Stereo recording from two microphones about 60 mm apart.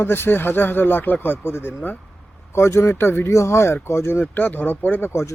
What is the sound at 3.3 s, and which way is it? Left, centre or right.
Speech, left.